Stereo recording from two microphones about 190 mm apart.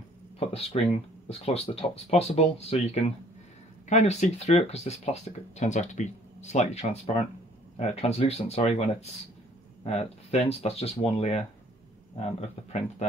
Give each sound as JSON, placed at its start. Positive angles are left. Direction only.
{"t": 0.4, "sound": "speech", "side_deg": 30}
{"t": 9.8, "sound": "speech", "side_deg": 30}